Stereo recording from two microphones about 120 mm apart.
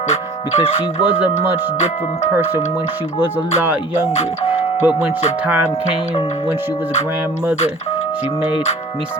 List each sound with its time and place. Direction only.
0.6 s speech: 15° right (ahead or behind)
2.3 s speech: 15° right (ahead or behind)
4.2 s speech: 55° left (ahead or behind)
4.8 s speech: 15° right (ahead or behind)
8.4 s speech: 55° left (ahead or behind)